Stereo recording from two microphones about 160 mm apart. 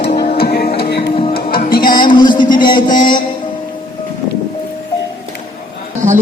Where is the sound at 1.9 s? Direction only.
30° left (ahead or behind).